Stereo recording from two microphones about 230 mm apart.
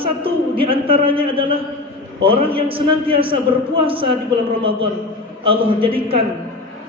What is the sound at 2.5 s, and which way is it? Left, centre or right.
Speech, right.